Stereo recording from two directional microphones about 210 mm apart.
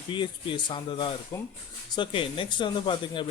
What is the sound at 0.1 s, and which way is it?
Speech, 20° left (ahead or behind).